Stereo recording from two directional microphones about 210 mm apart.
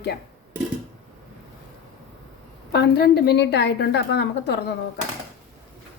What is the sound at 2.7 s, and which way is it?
Speech, 50° left (ahead or behind).